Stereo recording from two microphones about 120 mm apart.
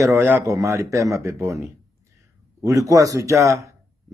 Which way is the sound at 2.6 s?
25° right (ahead or behind).